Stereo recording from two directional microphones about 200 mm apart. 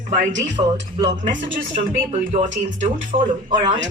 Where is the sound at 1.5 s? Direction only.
40° right (ahead or behind).